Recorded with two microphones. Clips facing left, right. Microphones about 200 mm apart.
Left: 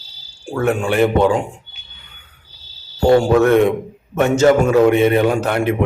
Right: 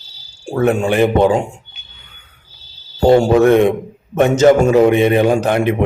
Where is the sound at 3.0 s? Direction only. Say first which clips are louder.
Right 2 dB; 20° right (ahead or behind).